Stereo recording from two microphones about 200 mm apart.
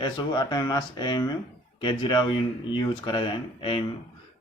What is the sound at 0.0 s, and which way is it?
Speech, 20° left (ahead or behind).